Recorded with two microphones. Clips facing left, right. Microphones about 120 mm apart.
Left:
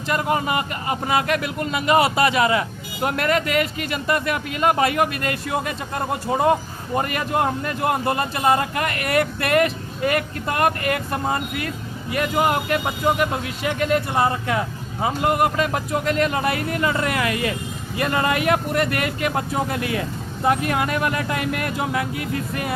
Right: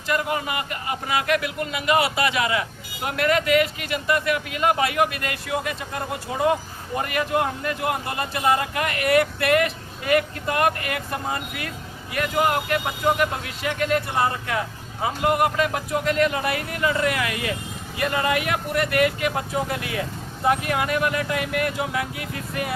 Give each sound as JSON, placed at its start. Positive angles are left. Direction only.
{"t": 0.1, "sound": "speech", "side_deg": 35}
{"t": 13.1, "sound": "speech", "side_deg": 20}
{"t": 20.5, "sound": "speech", "side_deg": 40}